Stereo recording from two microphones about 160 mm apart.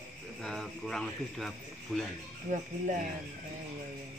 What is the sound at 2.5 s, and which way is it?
Speech, 50° right (ahead or behind).